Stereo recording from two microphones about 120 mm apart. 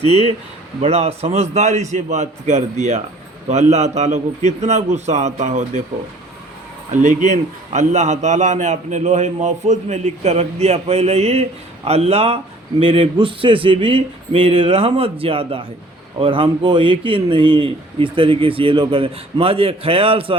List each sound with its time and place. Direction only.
0.8 s a man's voice: 60° right (ahead or behind)
6.9 s a man's voice: 90° right; by 20.3 s 50° right (ahead or behind)